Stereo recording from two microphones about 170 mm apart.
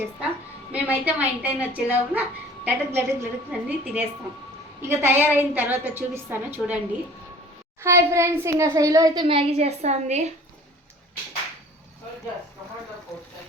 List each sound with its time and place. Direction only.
0.7 s a woman's voice: 10° right (ahead or behind)
7.9 s a woman's voice: 15° right (ahead or behind)
9.2 s a woman's voice: 35° right (ahead or behind)